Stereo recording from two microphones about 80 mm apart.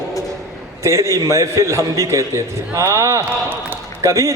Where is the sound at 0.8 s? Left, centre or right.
Right.